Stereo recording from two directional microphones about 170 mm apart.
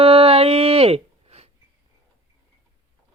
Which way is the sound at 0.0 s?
35° right (ahead or behind).